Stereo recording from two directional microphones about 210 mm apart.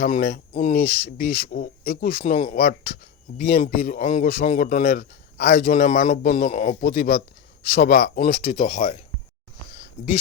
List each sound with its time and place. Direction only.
0.0 s speech: 45° left (ahead or behind)